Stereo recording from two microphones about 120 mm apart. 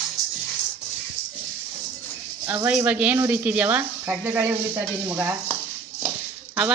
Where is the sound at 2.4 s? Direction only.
15° right (ahead or behind).